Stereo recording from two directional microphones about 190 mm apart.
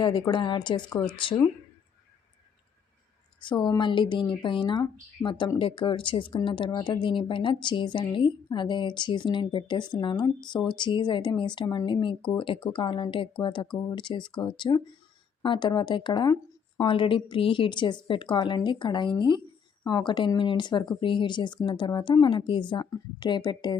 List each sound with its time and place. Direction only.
0.0 s speech: 25° left (ahead or behind)
3.4 s speech: 25° left (ahead or behind)